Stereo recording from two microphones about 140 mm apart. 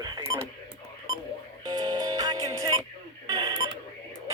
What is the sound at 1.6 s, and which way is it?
Music, 30° right (ahead or behind).